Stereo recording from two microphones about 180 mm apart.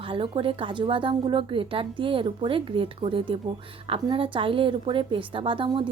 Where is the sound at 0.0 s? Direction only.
30° right (ahead or behind).